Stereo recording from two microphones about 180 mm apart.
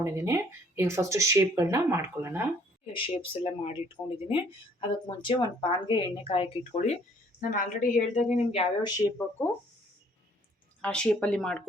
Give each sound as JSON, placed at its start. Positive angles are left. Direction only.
{"t": 0.0, "sound": "speech", "side_deg": -15}
{"t": 2.9, "sound": "a woman's voice", "side_deg": 30}
{"t": 8.8, "sound": "speech", "side_deg": 15}
{"t": 10.8, "sound": "speech", "side_deg": 5}